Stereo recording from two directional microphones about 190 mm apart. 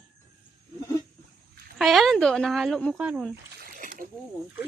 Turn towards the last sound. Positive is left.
turn(degrees=-45)  # may be behind; listen again after turning